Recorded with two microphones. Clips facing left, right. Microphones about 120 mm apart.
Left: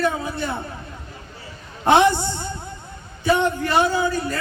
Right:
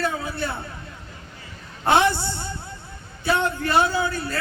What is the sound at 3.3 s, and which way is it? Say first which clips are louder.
A man's voice: right 2 dB; 15° left (ahead or behind).